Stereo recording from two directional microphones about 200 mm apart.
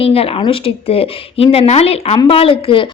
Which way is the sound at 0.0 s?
30° left (ahead or behind).